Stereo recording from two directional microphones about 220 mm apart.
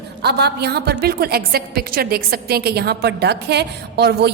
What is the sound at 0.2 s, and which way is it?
A woman's voice, 50° right (ahead or behind).